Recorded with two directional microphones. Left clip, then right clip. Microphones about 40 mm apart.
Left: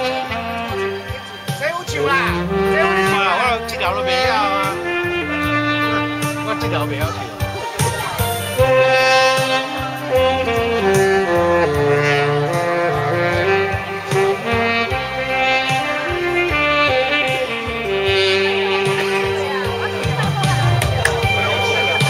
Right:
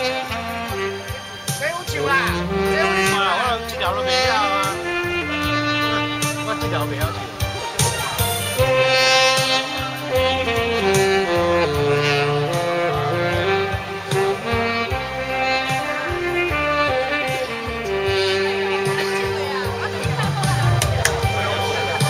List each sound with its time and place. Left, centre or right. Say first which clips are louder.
2.0 s music: left 2 dB; right
8.5 s brass instrument: left 4 dB; right
10.1 s saxophone: left 3 dB; right
12.6 s music: left 3 dB; right
16.3 s music: left 4 dB; right
16.9 s music: left 4 dB; centre